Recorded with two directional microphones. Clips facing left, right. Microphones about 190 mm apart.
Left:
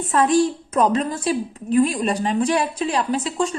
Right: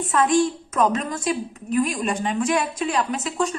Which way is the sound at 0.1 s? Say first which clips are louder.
Left 2 dB; 35° left (ahead or behind).